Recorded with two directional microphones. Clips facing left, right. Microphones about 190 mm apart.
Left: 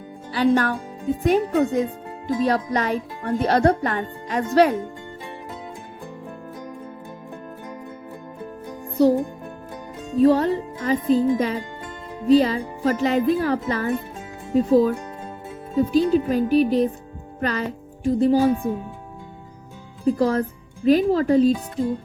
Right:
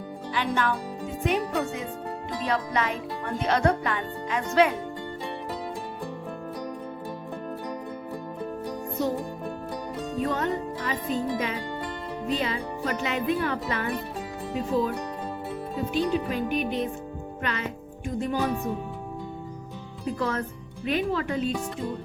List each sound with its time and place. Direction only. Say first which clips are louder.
0.3 s speech: left 8 dB; 40° left (ahead or behind)
9.0 s speech: left 11 dB; 35° left (ahead or behind)
10.2 s speech: left 11 dB; 35° left (ahead or behind)
20.1 s speech: left 9 dB; 35° left (ahead or behind)